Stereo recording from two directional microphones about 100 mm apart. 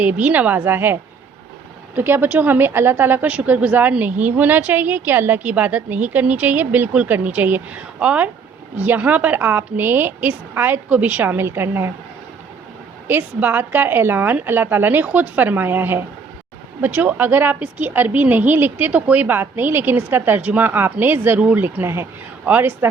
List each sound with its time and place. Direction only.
0.0 s a woman's voice: 15° right (ahead or behind)
2.0 s a woman's voice: 20° right (ahead or behind)
13.1 s speech: 20° right (ahead or behind)